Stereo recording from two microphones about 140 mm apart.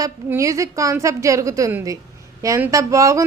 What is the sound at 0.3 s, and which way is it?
A woman's voice, 20° right (ahead or behind).